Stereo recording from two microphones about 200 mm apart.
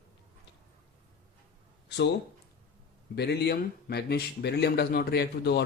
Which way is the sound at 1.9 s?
60° left (ahead or behind).